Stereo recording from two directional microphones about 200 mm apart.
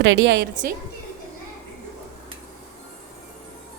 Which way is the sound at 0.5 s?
40° right (ahead or behind).